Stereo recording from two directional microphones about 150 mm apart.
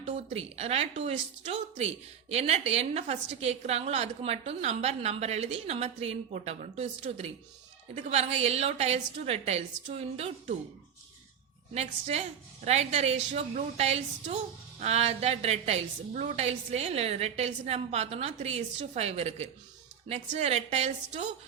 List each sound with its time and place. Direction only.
0.0 s a woman's voice: 45° right (ahead or behind)
11.7 s a woman's voice: 45° right (ahead or behind)